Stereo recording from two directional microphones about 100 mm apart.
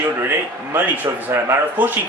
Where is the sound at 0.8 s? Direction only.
20° right (ahead or behind).